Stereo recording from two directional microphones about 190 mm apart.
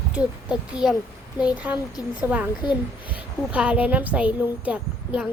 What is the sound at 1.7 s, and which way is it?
A child's voice, 20° left (ahead or behind).